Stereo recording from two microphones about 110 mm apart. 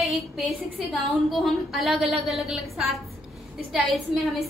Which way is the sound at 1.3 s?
Centre (ahead or behind).